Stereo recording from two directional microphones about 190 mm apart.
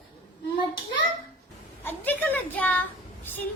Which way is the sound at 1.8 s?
10° left (ahead or behind).